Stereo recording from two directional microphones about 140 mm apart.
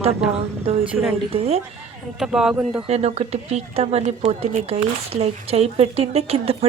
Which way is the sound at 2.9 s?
50° right (ahead or behind).